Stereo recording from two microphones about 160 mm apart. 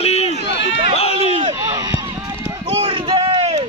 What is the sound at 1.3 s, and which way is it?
Run, 30° right (ahead or behind).